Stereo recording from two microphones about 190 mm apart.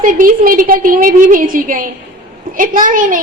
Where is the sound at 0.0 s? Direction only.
45° right (ahead or behind).